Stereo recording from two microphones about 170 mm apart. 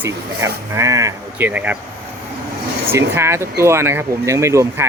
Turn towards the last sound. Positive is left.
turn(degrees=-15)  # may be behind; listen again after turning